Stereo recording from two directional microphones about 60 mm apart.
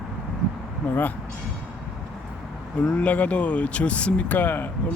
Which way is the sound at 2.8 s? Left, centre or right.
Left.